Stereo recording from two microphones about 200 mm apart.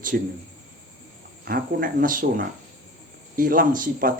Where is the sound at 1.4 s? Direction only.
45° right (ahead or behind).